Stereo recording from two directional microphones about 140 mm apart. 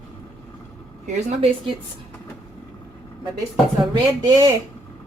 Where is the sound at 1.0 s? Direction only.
50° right (ahead or behind).